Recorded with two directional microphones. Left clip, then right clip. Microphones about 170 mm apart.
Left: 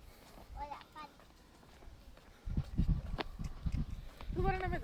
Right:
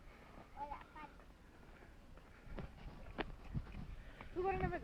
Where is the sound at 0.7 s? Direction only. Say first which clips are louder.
Left 3 dB; 25° left (ahead or behind).